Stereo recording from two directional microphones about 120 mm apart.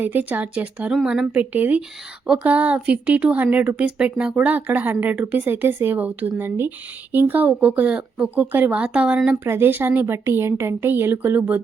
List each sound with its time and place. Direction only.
0.0 s a woman's voice: 15° right (ahead or behind)
9.4 s a woman's voice: 20° right (ahead or behind)